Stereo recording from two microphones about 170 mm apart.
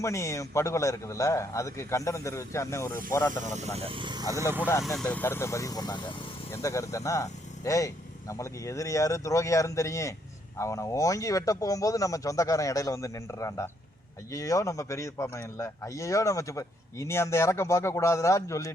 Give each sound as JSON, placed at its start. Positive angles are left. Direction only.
{"t": 0.0, "sound": "speech", "side_deg": 15}
{"t": 3.4, "sound": "speech", "side_deg": -45}
{"t": 3.8, "sound": "speech", "side_deg": -30}
{"t": 4.8, "sound": "speech", "side_deg": 0}